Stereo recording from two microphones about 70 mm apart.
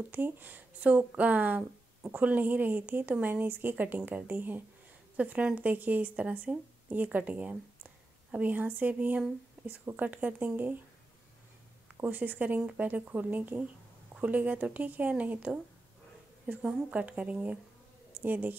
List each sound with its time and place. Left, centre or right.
0.1 s a woman's voice: right
12.0 s a woman's voice: right